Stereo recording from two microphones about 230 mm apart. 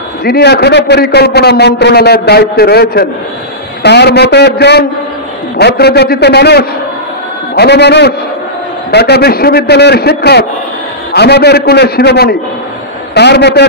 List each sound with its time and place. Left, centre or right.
0.2 s a man's voice: left